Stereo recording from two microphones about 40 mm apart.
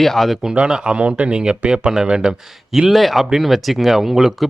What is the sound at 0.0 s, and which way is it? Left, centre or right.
Speech, centre.